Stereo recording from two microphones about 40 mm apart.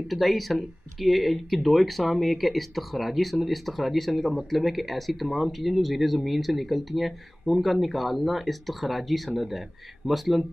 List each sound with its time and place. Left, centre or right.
0.1 s speech: centre